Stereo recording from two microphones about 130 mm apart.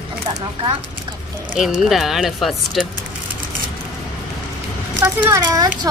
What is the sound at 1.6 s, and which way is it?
Speech, 5° right (ahead or behind).